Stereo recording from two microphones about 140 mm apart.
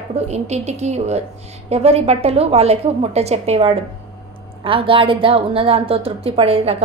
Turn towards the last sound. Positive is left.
turn(degrees=-45)  # may be behind; listen again after turning